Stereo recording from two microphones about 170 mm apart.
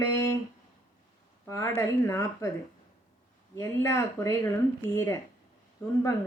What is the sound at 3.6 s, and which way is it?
Speech, 15° left (ahead or behind).